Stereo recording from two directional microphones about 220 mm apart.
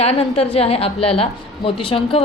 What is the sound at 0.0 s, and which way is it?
A woman's voice, 25° left (ahead or behind).